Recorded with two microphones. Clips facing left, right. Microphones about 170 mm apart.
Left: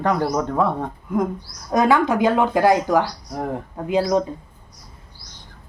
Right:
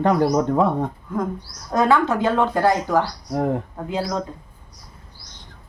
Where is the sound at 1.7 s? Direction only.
15° left (ahead or behind).